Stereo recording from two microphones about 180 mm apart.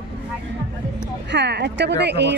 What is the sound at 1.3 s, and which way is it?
A woman's voice, 70° right (ahead or behind).